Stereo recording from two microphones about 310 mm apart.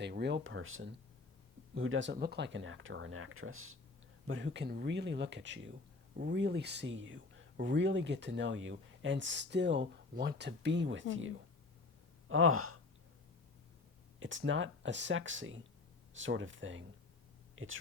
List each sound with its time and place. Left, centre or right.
0.0 s speech: right
14.2 s speech: right
17.5 s a sound: right